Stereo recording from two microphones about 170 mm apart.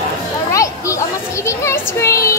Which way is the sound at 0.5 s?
20° left (ahead or behind).